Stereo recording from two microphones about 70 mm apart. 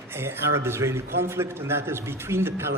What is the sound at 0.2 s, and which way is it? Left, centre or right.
A man's voice, right.